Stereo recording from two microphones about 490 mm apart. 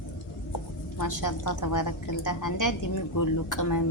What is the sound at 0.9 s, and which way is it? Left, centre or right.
A woman's voice, left.